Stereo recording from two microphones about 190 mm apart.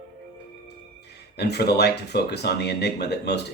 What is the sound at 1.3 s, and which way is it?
Speech, 60° left (ahead or behind).